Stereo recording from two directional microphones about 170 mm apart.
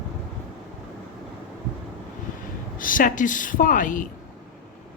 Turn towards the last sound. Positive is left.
turn(degrees=50)  # may be behind; listen again after turning